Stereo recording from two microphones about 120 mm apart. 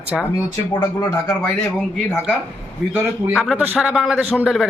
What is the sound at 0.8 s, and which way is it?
Speech, 25° left (ahead or behind).